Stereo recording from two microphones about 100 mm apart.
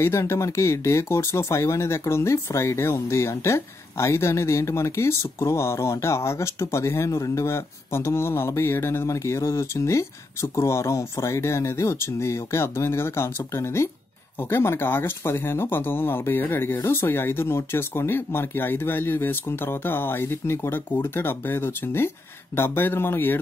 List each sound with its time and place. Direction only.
0.0 s speech: 25° left (ahead or behind)